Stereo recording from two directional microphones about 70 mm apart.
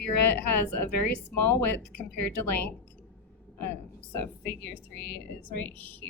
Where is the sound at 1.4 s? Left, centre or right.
Left.